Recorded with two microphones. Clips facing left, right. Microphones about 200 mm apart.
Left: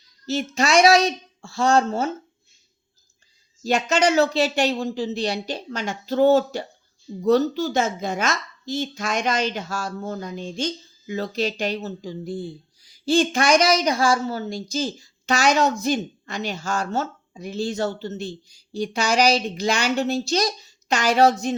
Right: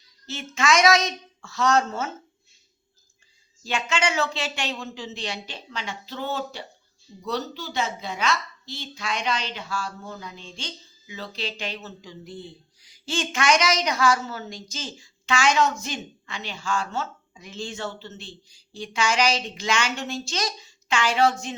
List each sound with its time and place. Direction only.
0.5 s a woman's voice: 35° left (ahead or behind)
3.6 s a woman's voice: 40° left (ahead or behind)